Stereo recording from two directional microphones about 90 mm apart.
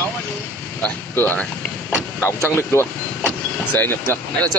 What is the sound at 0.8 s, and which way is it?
Speech, 15° left (ahead or behind).